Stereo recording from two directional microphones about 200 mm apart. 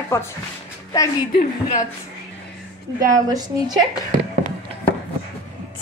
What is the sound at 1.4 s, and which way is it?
Speech, 40° left (ahead or behind).